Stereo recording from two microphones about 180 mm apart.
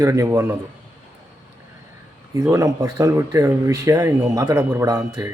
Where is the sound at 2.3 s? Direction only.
15° right (ahead or behind).